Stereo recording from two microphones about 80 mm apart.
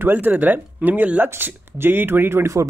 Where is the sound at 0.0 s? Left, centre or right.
Right.